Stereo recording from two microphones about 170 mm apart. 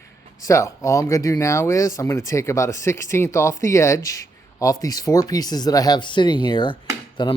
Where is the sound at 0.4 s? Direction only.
20° left (ahead or behind).